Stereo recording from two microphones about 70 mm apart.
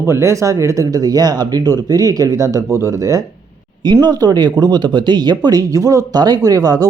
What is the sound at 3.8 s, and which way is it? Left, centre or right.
Speech, right.